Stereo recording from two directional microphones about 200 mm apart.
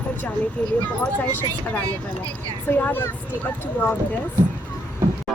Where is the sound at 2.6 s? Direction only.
10° left (ahead or behind).